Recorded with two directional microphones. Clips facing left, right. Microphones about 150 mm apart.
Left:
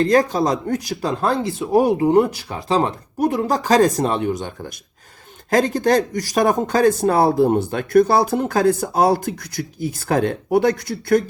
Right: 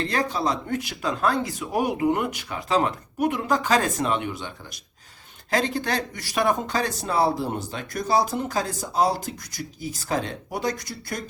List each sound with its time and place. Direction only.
0.0 s speech: 40° left (ahead or behind); by 11.2 s 60° left (ahead or behind)